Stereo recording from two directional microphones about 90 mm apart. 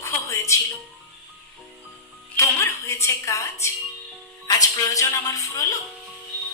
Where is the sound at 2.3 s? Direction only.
30° left (ahead or behind).